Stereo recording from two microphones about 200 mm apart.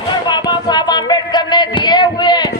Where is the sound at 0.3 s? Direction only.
20° left (ahead or behind).